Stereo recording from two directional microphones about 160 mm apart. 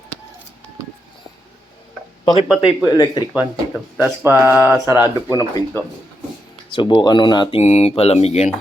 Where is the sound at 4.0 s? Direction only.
15° right (ahead or behind).